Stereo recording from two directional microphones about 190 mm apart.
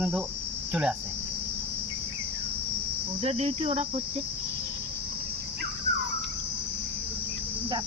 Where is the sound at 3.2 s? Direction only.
35° right (ahead or behind).